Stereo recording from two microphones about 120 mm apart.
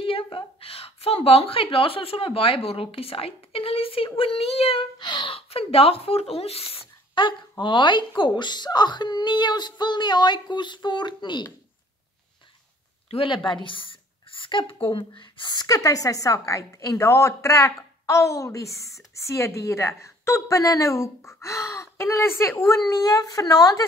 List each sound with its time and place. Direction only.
0.0 s a woman's voice: 50° left (ahead or behind)
13.1 s a woman's voice: 45° left (ahead or behind); by 23.8 s 25° left (ahead or behind)